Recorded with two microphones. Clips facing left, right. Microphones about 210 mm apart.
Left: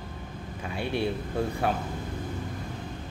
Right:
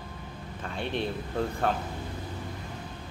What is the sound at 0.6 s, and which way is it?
Speech, 10° left (ahead or behind).